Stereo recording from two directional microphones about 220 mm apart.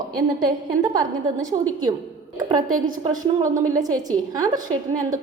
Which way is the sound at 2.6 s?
40° right (ahead or behind).